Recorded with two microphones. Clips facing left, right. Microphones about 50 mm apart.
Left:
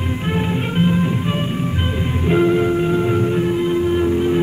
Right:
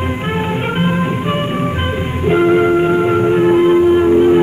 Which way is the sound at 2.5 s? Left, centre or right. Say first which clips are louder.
Right 5 dB; right.